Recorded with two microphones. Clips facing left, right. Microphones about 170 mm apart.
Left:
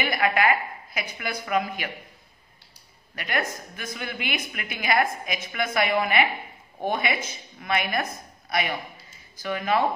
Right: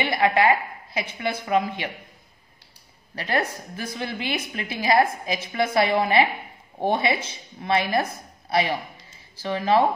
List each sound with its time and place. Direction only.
0.0 s speech: 25° right (ahead or behind)
3.2 s a woman's voice: 30° right (ahead or behind)